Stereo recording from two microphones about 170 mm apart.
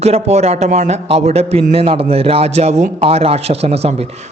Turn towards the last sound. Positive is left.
turn(degrees=-35)  # may be behind; listen again after turning